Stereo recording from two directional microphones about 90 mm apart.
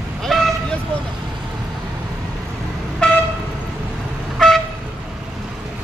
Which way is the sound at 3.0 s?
10° left (ahead or behind).